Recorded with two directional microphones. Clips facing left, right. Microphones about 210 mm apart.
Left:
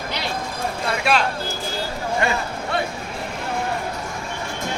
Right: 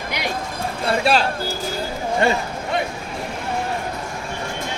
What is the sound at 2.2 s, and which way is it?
Speech, 30° right (ahead or behind).